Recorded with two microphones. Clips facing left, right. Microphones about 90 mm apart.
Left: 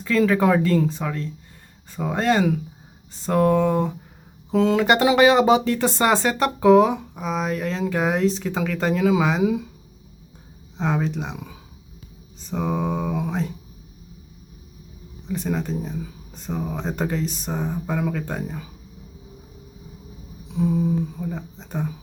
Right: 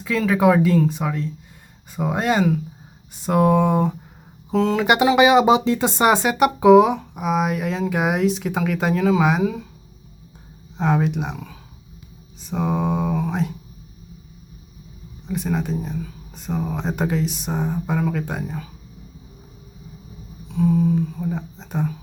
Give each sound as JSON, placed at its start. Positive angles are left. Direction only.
{"t": 0.2, "sound": "speech", "side_deg": -5}
{"t": 4.5, "sound": "speech", "side_deg": 0}
{"t": 5.1, "sound": "speech", "side_deg": -15}
{"t": 9.4, "sound": "a sound", "side_deg": 10}
{"t": 10.8, "sound": "speech", "side_deg": -5}
{"t": 12.4, "sound": "mantra", "side_deg": -5}
{"t": 15.3, "sound": "speech", "side_deg": -5}
{"t": 20.5, "sound": "a sound", "side_deg": 10}
{"t": 21.2, "sound": "speech", "side_deg": 0}